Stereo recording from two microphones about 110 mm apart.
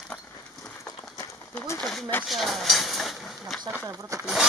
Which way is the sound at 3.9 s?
30° right (ahead or behind).